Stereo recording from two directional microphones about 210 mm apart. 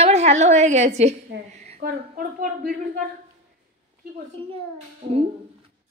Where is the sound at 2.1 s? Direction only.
40° right (ahead or behind).